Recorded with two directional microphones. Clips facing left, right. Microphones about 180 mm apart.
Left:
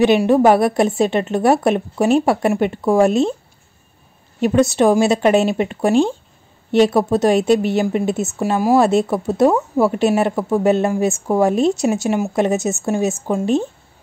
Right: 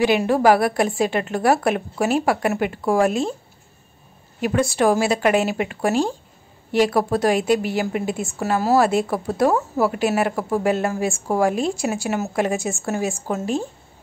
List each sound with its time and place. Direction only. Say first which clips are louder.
0.3 s a woman's voice: left 4 dB; 20° left (ahead or behind)
4.4 s a woman's voice: left 5 dB; 25° left (ahead or behind)